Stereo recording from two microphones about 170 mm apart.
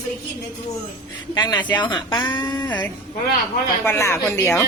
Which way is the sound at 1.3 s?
25° left (ahead or behind).